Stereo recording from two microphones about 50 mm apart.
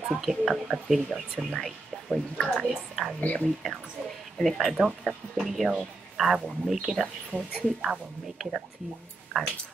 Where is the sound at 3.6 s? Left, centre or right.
Centre.